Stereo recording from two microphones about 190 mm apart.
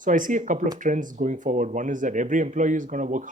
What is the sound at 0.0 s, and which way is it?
Speech, 40° right (ahead or behind).